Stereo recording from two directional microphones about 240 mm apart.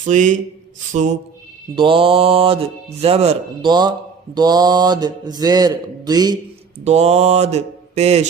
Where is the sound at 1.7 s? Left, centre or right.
Right.